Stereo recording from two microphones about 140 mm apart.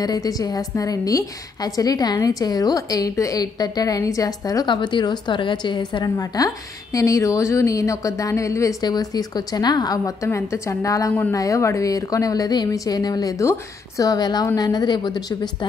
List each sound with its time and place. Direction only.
0.0 s a woman's voice: 25° left (ahead or behind)